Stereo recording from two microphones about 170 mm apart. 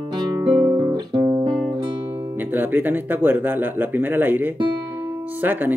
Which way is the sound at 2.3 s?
10° right (ahead or behind).